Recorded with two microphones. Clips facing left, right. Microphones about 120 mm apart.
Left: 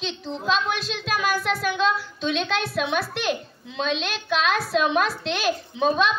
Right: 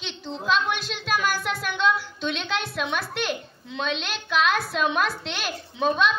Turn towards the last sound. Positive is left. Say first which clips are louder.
# left 5 dB
turn(degrees=0)  # may be behind; listen again after turning